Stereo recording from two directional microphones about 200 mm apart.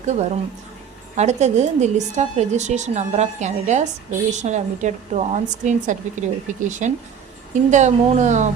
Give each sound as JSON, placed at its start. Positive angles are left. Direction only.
{"t": 0.0, "sound": "a woman's voice", "side_deg": -35}